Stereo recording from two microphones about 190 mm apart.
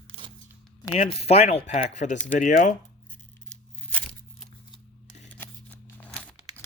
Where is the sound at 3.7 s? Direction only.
5° left (ahead or behind).